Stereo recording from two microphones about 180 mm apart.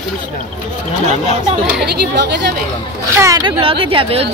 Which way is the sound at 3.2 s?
15° right (ahead or behind).